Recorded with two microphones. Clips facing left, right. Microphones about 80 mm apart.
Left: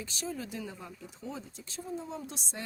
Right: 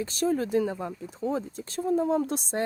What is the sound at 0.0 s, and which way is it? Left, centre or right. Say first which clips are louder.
Speech: right 12 dB; right.